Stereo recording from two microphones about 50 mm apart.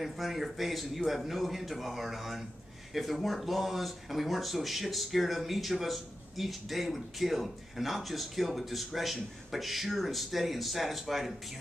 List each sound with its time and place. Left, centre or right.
0.0 s speech: centre